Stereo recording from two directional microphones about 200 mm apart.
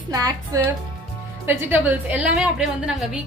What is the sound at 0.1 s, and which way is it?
A woman's voice, 15° right (ahead or behind).